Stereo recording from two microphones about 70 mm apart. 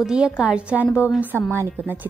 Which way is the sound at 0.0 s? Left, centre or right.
Centre.